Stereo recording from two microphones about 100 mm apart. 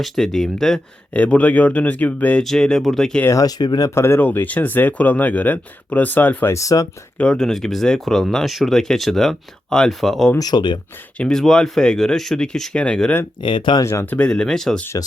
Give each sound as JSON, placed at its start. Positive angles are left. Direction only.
{"t": 0.0, "sound": "speech", "side_deg": 5}
{"t": 1.1, "sound": "speech", "side_deg": 15}
{"t": 2.4, "sound": "speech", "side_deg": 5}
{"t": 3.2, "sound": "speech", "side_deg": 35}
{"t": 3.9, "sound": "speech", "side_deg": 25}
{"t": 6.5, "sound": "speech", "side_deg": 35}
{"t": 7.2, "sound": "speech", "side_deg": 10}
{"t": 10.3, "sound": "speech", "side_deg": 45}
{"t": 11.2, "sound": "speech", "side_deg": 5}
{"t": 13.4, "sound": "speech", "side_deg": 55}
{"t": 14.0, "sound": "speech", "side_deg": 15}